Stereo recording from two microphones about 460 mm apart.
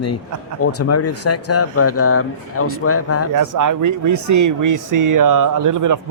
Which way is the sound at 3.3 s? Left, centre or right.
Right.